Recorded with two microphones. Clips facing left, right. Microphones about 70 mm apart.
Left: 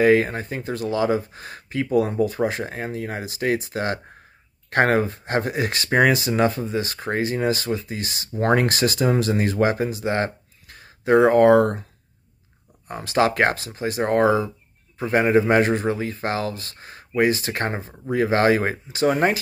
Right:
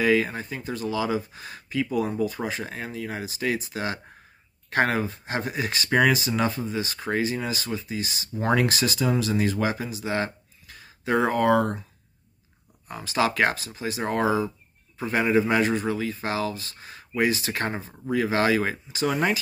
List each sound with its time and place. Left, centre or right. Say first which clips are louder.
0.0 s speech: left 5 dB; left
12.8 s speech: left 4 dB; left